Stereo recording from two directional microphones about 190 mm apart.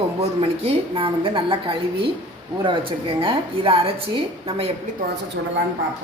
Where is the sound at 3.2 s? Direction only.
30° right (ahead or behind).